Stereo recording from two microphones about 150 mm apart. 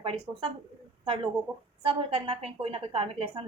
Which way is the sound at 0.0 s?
30° right (ahead or behind).